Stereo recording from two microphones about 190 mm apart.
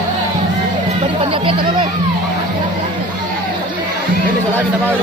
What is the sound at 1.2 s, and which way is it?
Chatter, 25° right (ahead or behind).